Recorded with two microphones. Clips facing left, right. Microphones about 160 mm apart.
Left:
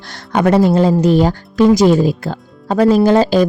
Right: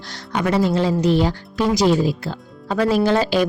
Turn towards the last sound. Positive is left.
turn(degrees=40)  # may be behind; listen again after turning